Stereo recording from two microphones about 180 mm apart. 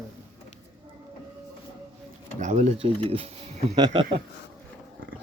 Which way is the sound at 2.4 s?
40° right (ahead or behind).